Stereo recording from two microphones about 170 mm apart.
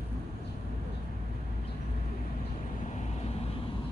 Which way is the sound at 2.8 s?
40° left (ahead or behind).